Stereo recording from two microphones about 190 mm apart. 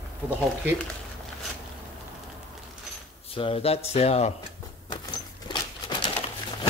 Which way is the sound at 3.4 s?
30° left (ahead or behind).